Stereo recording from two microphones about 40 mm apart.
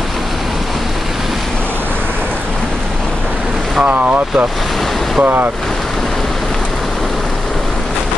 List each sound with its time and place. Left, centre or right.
3.8 s speech: right
5.2 s speech: right